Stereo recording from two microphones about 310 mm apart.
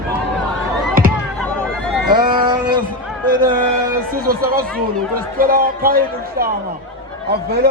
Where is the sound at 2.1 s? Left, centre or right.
Centre.